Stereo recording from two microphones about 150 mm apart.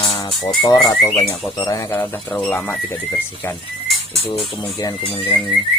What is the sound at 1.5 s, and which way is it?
Speech, 25° left (ahead or behind).